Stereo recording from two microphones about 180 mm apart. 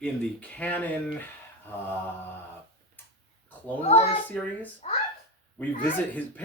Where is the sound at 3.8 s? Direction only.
35° left (ahead or behind).